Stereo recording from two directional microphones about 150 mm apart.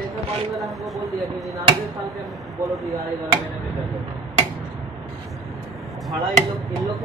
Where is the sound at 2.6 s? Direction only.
20° right (ahead or behind).